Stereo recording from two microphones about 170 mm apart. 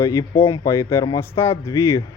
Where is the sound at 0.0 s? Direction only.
15° left (ahead or behind).